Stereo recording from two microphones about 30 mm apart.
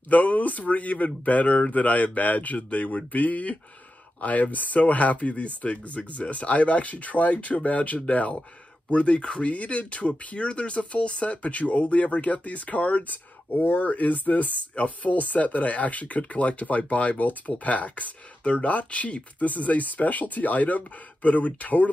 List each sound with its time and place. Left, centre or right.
0.1 s speech: left
8.9 s speech: left
9.4 s speech: left